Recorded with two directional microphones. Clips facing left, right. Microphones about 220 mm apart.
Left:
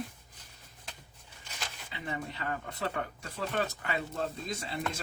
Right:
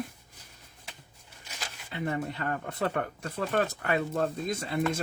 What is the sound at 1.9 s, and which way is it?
Speech, 50° right (ahead or behind).